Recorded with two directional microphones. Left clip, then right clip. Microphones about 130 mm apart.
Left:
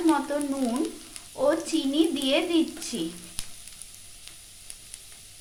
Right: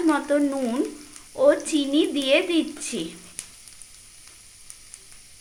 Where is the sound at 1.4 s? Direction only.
25° right (ahead or behind).